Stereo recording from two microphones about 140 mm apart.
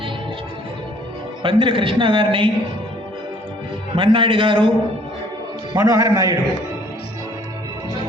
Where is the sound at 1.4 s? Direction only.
35° right (ahead or behind).